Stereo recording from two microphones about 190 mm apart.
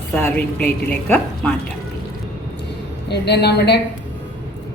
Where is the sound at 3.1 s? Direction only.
60° left (ahead or behind).